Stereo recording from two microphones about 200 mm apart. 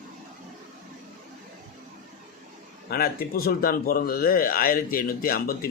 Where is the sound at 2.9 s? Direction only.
50° left (ahead or behind).